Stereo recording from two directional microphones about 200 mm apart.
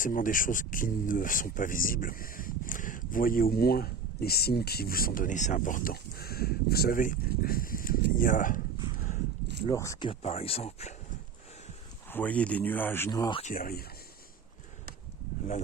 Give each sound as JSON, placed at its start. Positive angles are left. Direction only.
{"t": 0.0, "sound": "speech", "side_deg": 40}
{"t": 9.6, "sound": "speech", "side_deg": 15}
{"t": 10.1, "sound": "speech", "side_deg": 30}
{"t": 12.1, "sound": "speech", "side_deg": 5}
{"t": 13.4, "sound": "speech", "side_deg": 45}